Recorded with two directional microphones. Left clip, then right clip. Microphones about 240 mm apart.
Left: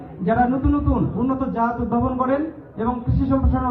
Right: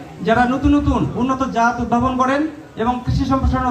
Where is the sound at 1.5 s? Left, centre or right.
Right.